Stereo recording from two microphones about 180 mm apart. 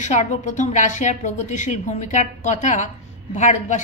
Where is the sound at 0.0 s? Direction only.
40° left (ahead or behind).